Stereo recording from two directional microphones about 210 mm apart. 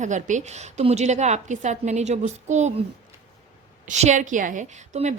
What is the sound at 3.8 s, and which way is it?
A woman's voice, 35° right (ahead or behind).